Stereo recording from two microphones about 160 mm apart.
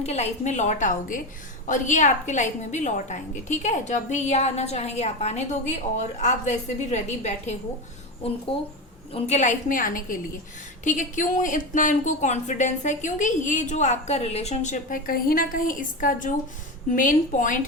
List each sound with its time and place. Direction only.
0.0 s speech: 45° left (ahead or behind)
9.1 s a woman's voice: 45° left (ahead or behind)